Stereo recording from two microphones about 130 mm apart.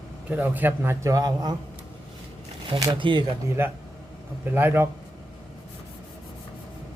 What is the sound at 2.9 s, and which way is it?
Speech, 40° right (ahead or behind).